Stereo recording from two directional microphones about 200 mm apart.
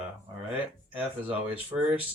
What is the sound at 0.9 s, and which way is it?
Speech, 10° right (ahead or behind).